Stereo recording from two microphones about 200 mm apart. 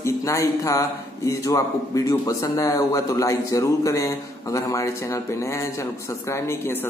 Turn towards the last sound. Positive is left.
turn(degrees=10)  # may be behind; listen again after turning